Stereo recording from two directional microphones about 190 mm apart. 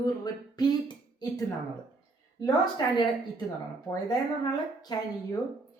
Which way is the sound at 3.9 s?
20° left (ahead or behind).